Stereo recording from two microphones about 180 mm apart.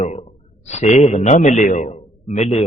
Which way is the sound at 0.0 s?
35° left (ahead or behind).